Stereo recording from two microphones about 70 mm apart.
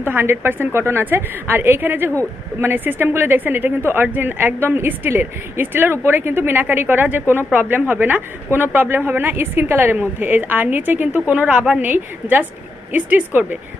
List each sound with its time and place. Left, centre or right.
0.0 s a woman's voice: right